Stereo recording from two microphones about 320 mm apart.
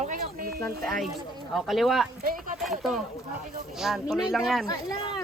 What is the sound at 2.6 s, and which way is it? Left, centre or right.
Speech, centre.